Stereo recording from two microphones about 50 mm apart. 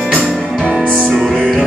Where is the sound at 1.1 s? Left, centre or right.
Centre.